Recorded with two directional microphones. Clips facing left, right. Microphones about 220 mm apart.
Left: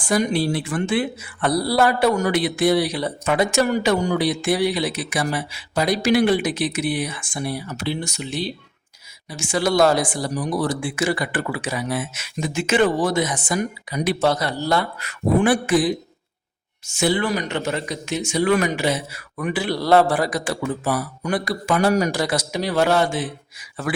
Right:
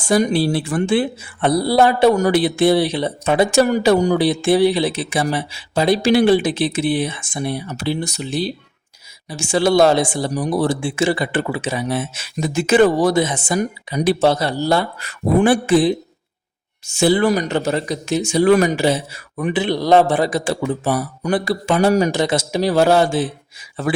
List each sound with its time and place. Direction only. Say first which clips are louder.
0.0 s speech: right 4 dB; 30° right (ahead or behind)
2.1 s speech: right 5 dB; 35° right (ahead or behind)
7.9 s speech: right 5 dB; 35° right (ahead or behind)